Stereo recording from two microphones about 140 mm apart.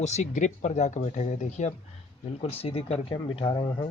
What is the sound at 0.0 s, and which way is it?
Speech, 55° left (ahead or behind).